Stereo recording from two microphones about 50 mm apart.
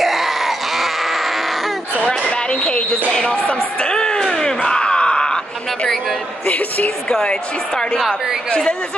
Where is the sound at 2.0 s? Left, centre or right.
Centre.